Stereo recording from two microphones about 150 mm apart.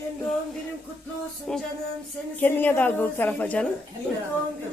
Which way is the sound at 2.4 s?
10° left (ahead or behind).